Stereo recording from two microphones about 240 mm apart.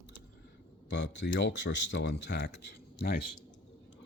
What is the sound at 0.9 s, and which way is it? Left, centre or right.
Speech, left.